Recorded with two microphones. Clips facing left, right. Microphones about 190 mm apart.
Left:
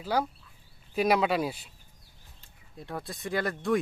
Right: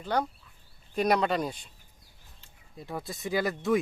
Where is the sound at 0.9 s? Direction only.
5° left (ahead or behind).